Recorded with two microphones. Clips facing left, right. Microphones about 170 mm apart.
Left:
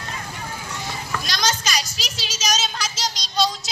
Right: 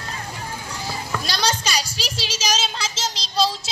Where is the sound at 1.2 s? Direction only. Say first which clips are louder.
Right 1 dB; 30° right (ahead or behind).